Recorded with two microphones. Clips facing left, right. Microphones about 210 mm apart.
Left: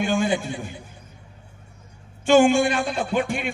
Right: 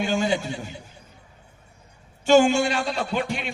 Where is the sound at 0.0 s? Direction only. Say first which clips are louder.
Left 1 dB; 50° left (ahead or behind).